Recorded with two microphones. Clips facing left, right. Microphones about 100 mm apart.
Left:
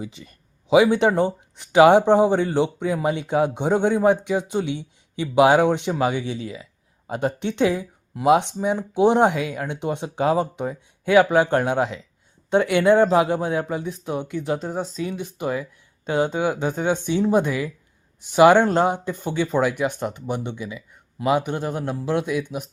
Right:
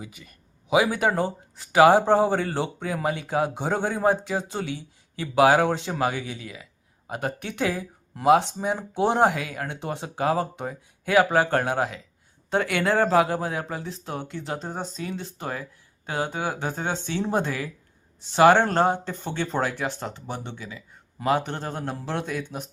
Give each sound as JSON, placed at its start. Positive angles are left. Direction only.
{"t": 0.0, "sound": "speech", "side_deg": 30}
{"t": 14.6, "sound": "speech", "side_deg": 5}
{"t": 15.0, "sound": "speech", "side_deg": 15}